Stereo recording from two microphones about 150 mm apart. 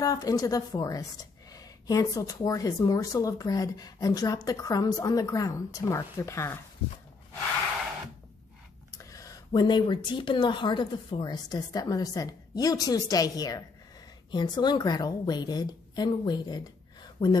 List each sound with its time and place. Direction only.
0.0 s speech: 25° left (ahead or behind)
8.9 s a woman's voice: 25° left (ahead or behind)